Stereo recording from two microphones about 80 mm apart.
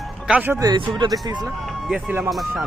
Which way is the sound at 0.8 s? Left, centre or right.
Right.